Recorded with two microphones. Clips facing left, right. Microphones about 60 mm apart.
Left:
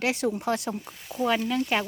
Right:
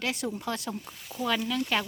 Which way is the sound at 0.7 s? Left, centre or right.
Centre.